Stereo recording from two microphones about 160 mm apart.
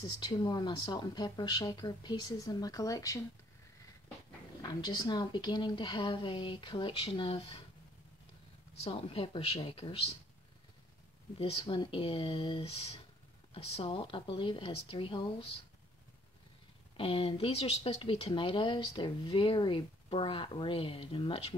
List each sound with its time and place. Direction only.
0.0 s speech: 25° left (ahead or behind)
4.6 s speech: 25° left (ahead or behind)
8.8 s speech: 40° left (ahead or behind)
11.3 s speech: 35° left (ahead or behind)
16.9 s speech: 35° left (ahead or behind)